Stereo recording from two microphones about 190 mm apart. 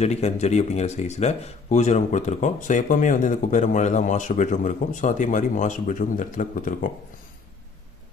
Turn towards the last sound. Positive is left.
turn(degrees=45)  # may be behind; listen again after turning